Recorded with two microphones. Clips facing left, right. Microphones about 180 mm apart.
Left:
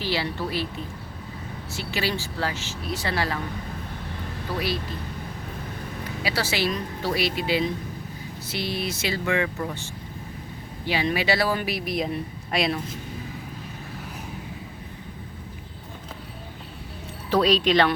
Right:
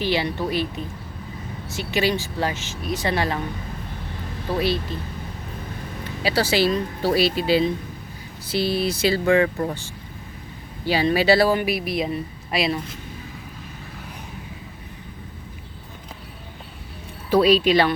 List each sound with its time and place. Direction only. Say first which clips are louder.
0.0 s speech: right 4 dB; 20° right (ahead or behind)
1.7 s speech: right 6 dB; 20° right (ahead or behind)
4.5 s speech: right 6 dB; 25° right (ahead or behind)
6.2 s a woman's voice: right 6 dB; 30° right (ahead or behind)
11.6 s a woman's voice: right 3 dB; 5° right (ahead or behind)
17.3 s speech: right 3 dB; 10° right (ahead or behind)